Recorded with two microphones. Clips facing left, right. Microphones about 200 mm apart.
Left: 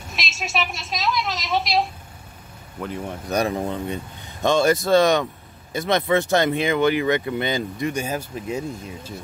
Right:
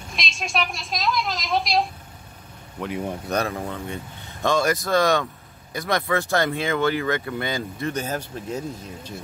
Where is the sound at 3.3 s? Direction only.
20° left (ahead or behind).